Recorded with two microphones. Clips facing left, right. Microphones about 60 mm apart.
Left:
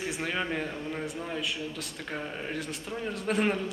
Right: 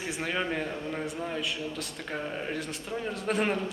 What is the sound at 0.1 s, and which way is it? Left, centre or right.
A man's voice, centre.